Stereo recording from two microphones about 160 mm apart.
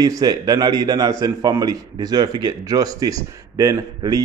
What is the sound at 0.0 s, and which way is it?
A man's voice, 25° right (ahead or behind).